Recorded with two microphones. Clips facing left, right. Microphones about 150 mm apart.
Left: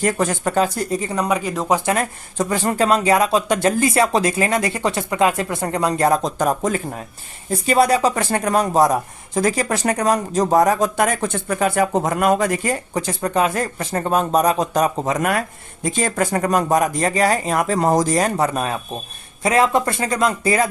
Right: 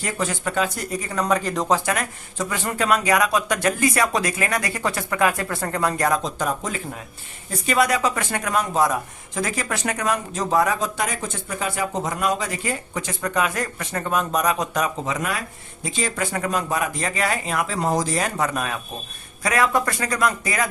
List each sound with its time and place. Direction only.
0.0 s speech: 45° left (ahead or behind); by 1.2 s 25° left (ahead or behind)
1.2 s speech: 10° left (ahead or behind)
1.8 s speech: 30° left (ahead or behind)
6.1 s speech: 45° left (ahead or behind)
7.5 s speech: 30° left (ahead or behind); by 12.7 s 55° left (ahead or behind)
12.9 s speech: 35° left (ahead or behind)